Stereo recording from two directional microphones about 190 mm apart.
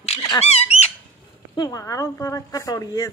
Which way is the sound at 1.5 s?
20° left (ahead or behind).